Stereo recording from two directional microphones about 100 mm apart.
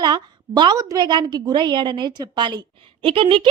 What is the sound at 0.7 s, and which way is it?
Speech, 35° right (ahead or behind).